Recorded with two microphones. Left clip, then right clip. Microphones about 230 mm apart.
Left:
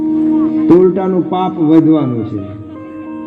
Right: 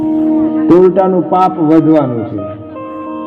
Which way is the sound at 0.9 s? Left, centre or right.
Left.